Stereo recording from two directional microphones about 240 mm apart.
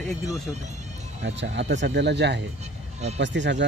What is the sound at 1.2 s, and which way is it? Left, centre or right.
Speech, right.